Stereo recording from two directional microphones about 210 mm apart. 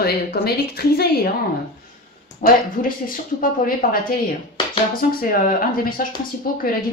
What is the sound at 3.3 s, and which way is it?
Speech, 40° left (ahead or behind).